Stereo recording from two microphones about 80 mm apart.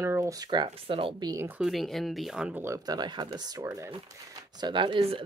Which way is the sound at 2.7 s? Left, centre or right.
Right.